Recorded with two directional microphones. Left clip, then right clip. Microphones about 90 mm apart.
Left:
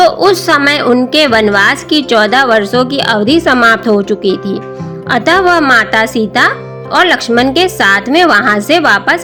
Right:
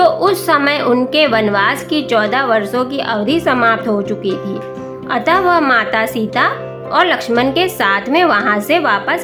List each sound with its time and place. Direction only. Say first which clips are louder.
0.0 s a woman's voice: left 4 dB; 50° left (ahead or behind)